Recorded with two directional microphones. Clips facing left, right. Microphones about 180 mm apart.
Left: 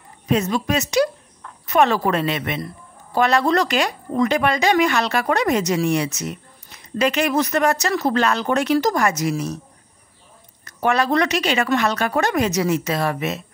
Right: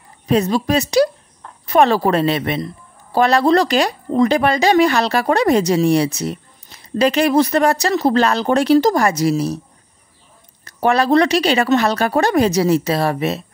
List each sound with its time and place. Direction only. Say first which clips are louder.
0.3 s speech: right 4 dB; 35° right (ahead or behind)
10.6 s speech: right 4 dB; 30° right (ahead or behind)